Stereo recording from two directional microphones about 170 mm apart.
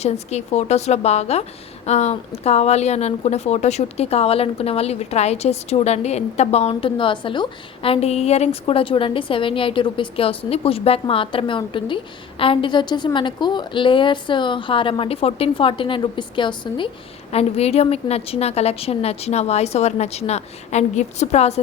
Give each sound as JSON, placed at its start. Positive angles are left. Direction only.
{"t": 0.0, "sound": "a woman's voice", "side_deg": 40}